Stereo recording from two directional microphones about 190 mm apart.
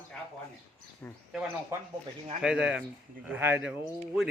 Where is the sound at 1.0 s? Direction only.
10° left (ahead or behind).